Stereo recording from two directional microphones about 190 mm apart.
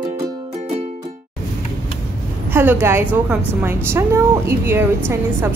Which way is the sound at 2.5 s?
10° right (ahead or behind).